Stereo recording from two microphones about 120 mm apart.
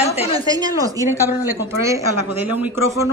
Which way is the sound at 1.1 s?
20° right (ahead or behind).